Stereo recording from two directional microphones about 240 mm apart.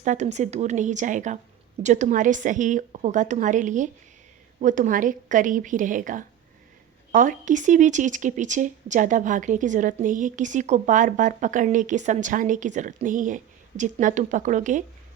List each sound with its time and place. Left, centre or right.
0.0 s speech: right